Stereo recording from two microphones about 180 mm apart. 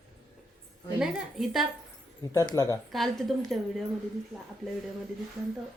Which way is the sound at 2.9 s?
Centre (ahead or behind).